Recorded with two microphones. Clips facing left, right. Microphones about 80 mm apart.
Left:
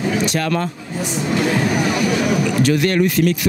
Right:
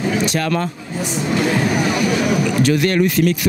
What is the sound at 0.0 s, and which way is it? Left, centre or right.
Speech, centre.